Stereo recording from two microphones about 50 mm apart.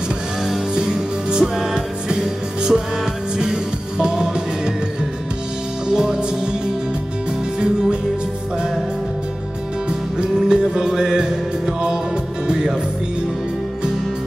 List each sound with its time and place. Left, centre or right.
0.7 s music: centre
4.0 s music: centre
5.9 s music: centre
9.8 s music: centre